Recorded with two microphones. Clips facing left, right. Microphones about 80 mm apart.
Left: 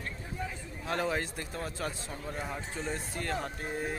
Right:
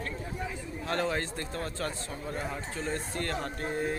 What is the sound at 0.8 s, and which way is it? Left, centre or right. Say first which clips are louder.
A man's voice: right 1 dB; centre.